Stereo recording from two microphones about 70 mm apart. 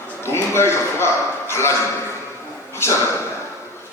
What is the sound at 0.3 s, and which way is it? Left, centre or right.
A man's voice, left.